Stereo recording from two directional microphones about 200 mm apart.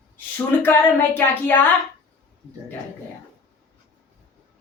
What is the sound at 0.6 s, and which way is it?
A woman's voice, 10° left (ahead or behind).